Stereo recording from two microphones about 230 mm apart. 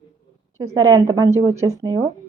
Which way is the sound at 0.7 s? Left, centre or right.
Centre.